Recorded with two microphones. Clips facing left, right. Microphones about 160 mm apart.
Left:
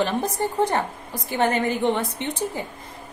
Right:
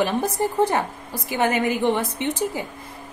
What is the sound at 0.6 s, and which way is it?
A woman's voice, 10° right (ahead or behind).